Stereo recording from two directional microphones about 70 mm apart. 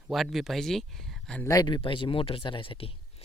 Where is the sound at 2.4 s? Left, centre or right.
Left.